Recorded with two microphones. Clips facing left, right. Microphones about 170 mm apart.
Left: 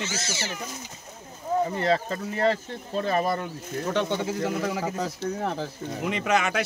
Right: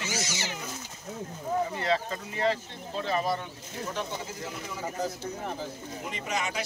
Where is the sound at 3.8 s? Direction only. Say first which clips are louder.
Left 8 dB; 75° left (ahead or behind).